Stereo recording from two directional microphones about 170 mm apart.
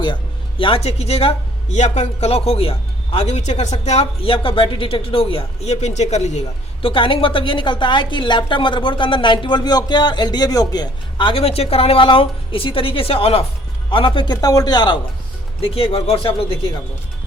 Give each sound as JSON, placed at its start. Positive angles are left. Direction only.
{"t": 0.6, "sound": "speech", "side_deg": 35}
{"t": 6.8, "sound": "a woman's voice", "side_deg": 30}